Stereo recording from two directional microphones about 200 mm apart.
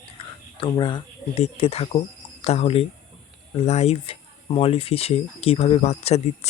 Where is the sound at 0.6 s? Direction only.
25° left (ahead or behind).